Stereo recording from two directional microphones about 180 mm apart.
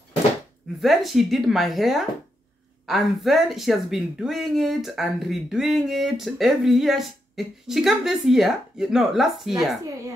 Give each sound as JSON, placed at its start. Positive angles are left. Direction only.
{"t": 0.7, "sound": "speech", "side_deg": 0}